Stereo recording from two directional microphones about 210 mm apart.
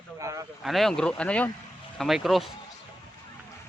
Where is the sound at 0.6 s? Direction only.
Centre (ahead or behind).